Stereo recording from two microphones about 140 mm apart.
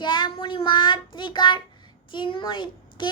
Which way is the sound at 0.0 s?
35° left (ahead or behind).